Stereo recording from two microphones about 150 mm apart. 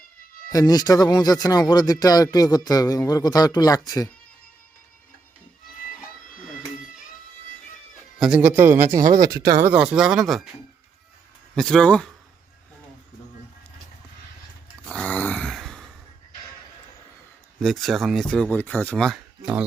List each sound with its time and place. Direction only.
0.5 s speech: 25° left (ahead or behind)
8.2 s speech: 10° right (ahead or behind)
9.7 s speech: 5° right (ahead or behind)
11.5 s speech: 5° left (ahead or behind)
14.8 s a sound: 5° left (ahead or behind)
17.6 s speech: centre (ahead or behind)